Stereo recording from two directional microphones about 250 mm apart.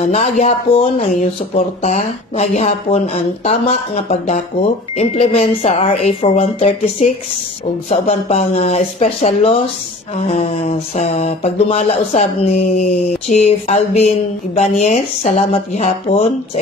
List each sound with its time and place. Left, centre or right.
0.0 s speech: left
8.3 s speech: left